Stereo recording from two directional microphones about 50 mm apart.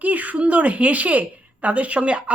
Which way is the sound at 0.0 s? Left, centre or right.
Right.